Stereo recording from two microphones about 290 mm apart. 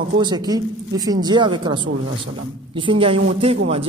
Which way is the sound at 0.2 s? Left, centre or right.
Centre.